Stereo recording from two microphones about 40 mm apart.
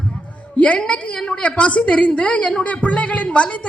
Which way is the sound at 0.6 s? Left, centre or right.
Left.